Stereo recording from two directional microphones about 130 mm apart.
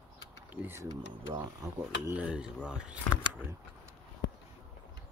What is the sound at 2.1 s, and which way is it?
Speech, 5° right (ahead or behind).